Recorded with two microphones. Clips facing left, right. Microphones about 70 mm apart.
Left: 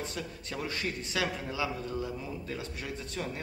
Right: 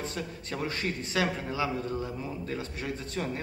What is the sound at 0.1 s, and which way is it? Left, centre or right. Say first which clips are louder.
A man's voice: right 3 dB; right.